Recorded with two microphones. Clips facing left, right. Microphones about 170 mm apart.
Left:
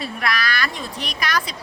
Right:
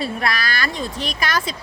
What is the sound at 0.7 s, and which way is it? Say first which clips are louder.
Speech: right 4 dB; centre (ahead or behind).